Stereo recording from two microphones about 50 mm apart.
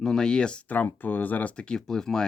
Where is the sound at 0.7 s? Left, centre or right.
Left.